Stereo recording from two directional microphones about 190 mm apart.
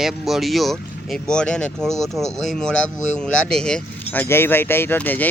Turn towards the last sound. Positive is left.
turn(degrees=10)  # may be behind; listen again after turning